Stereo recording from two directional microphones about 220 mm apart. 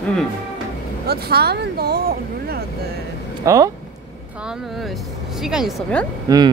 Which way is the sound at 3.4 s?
15° right (ahead or behind).